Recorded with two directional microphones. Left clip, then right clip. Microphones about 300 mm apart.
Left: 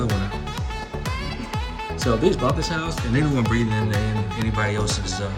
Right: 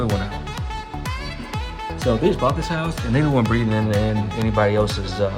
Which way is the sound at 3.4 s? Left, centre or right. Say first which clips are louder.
Right 2 dB; centre.